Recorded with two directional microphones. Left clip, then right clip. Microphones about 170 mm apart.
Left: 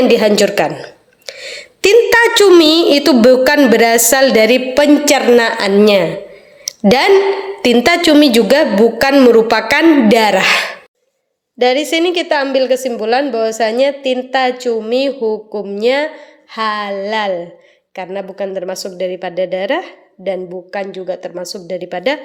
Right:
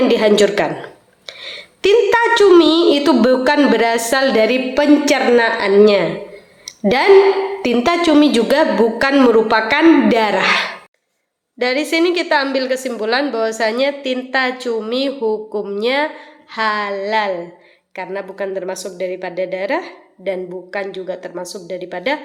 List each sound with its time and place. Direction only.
0.0 s a woman's voice: 40° left (ahead or behind)
6.7 s a sound: 45° left (ahead or behind)
7.6 s a woman's voice: 45° left (ahead or behind)